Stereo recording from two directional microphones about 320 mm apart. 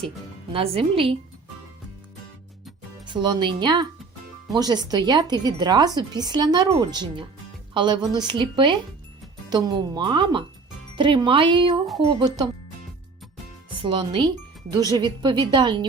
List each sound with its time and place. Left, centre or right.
0.5 s speech: centre
3.1 s speech: centre
13.7 s speech: centre